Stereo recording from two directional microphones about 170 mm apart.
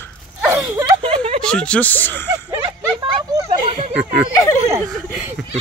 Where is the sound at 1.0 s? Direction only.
35° right (ahead or behind).